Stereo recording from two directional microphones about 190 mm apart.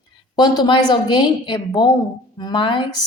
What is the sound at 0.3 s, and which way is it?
Speech, 25° left (ahead or behind).